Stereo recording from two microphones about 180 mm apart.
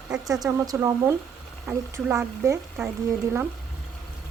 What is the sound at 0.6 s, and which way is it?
Speech, 15° right (ahead or behind).